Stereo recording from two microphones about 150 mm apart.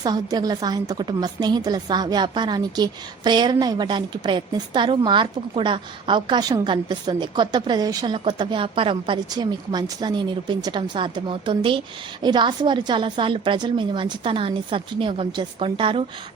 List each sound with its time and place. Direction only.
0.0 s a woman's voice: 25° right (ahead or behind)